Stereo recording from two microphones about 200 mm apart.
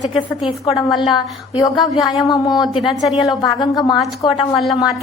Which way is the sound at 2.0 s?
Centre (ahead or behind).